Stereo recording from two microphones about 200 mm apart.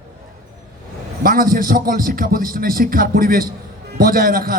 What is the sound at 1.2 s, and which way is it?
A man's voice, 45° right (ahead or behind).